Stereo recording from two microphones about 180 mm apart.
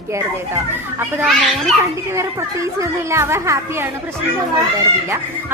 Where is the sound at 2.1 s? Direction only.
15° right (ahead or behind).